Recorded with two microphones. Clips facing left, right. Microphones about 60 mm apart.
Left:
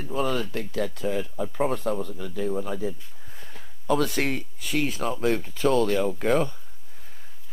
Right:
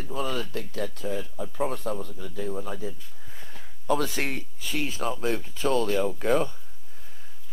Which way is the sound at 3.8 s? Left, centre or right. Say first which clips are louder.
Left 2 dB; left.